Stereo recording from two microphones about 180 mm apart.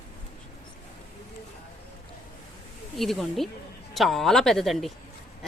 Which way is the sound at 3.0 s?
Centre (ahead or behind).